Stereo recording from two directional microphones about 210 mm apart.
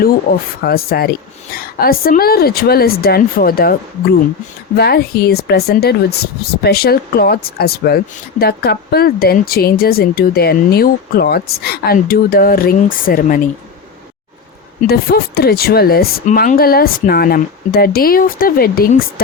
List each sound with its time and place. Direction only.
0.6 s speech: 45° left (ahead or behind)
4.8 s speech: 50° left (ahead or behind)
14.8 s speech: 45° left (ahead or behind)